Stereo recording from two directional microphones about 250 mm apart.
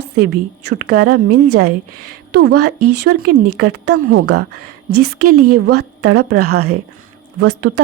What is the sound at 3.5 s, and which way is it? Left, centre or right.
Speech, right.